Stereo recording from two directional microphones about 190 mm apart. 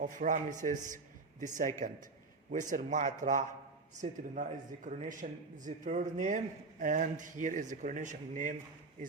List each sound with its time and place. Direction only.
0.0 s speech: 40° right (ahead or behind)